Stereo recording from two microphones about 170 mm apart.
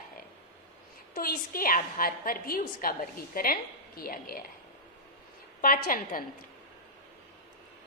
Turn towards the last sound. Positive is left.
turn(degrees=55)  # may be behind; listen again after turning